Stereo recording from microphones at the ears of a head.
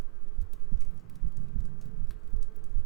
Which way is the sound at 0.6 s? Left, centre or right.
Right.